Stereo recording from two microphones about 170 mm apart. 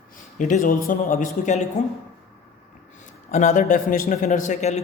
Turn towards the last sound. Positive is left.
turn(degrees=40)  # may be behind; listen again after turning